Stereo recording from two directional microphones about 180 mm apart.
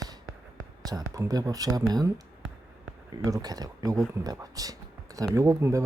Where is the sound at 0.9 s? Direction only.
20° right (ahead or behind).